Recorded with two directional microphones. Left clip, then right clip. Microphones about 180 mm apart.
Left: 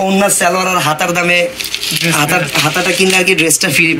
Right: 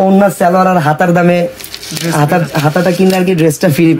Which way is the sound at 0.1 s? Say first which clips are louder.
Right 3 dB; 55° right (ahead or behind).